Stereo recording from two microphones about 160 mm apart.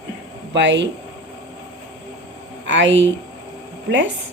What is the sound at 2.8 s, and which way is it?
Speech, 90° right.